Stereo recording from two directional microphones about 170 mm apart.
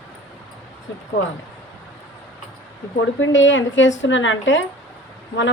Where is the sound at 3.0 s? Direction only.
90° left.